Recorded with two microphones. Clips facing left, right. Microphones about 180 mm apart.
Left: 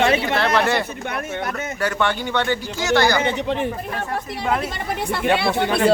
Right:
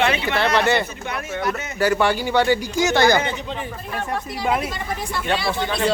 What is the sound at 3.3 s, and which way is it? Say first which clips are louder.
Speech: left 7 dB; 65° left (ahead or behind).